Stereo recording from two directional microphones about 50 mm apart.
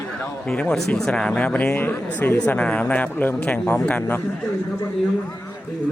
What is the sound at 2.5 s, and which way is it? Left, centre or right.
Speech, left.